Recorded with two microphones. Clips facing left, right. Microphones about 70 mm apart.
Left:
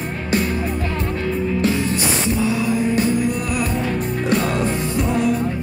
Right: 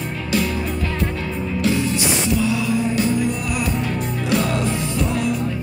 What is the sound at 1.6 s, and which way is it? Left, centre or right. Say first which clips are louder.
Music: right 4 dB; left.